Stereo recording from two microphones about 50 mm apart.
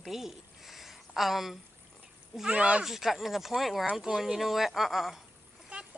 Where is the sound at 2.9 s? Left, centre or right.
Centre.